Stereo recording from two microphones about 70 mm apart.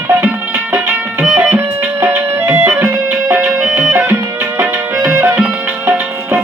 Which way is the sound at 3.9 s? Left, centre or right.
Right.